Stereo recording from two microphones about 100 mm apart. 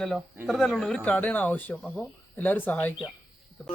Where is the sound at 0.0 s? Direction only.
5° left (ahead or behind).